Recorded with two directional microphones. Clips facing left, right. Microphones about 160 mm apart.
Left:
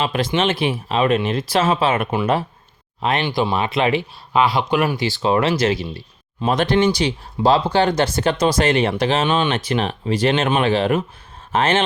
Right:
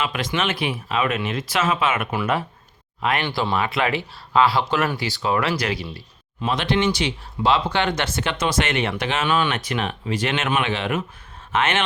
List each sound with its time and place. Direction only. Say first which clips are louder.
0.0 s speech: left 5 dB; 30° left (ahead or behind)
3.2 s speech: left 3 dB; 15° left (ahead or behind)
5.0 s speech: left 5 dB; 25° left (ahead or behind)
6.4 s speech: left 5 dB; 45° left (ahead or behind)